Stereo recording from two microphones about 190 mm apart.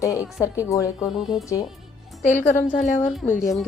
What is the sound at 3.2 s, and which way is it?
Speech, 45° left (ahead or behind).